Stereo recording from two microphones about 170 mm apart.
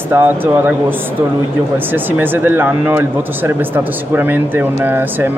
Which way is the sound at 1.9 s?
10° right (ahead or behind).